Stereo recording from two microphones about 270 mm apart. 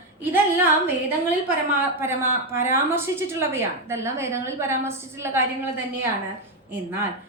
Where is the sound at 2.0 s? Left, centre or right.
Centre.